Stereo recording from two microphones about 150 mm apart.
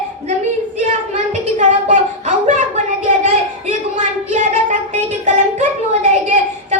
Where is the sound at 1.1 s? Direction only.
55° right (ahead or behind).